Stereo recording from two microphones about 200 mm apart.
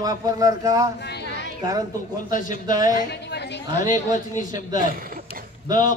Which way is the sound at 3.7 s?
40° left (ahead or behind).